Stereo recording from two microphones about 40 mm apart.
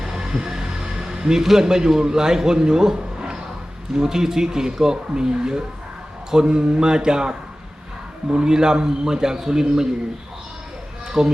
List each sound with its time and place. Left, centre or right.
0.0 s a man's voice: centre
11.2 s speech: centre